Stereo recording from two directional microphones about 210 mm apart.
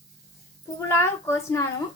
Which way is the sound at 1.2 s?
10° left (ahead or behind).